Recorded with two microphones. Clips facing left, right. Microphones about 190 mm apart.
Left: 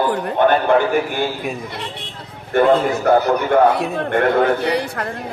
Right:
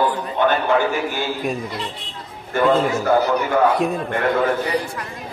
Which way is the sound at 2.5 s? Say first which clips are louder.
Left 3 dB; 55° left (ahead or behind).